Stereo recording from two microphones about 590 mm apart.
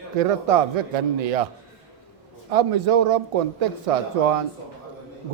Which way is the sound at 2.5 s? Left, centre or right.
Right.